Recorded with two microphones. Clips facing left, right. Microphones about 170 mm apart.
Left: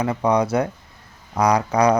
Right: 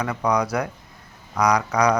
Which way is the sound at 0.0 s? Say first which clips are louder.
Left 3 dB; 25° left (ahead or behind).